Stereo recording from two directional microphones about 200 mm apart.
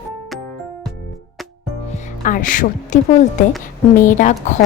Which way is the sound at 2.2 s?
40° left (ahead or behind).